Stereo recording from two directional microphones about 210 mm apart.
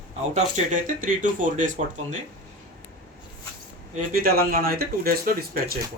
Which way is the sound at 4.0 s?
45° right (ahead or behind).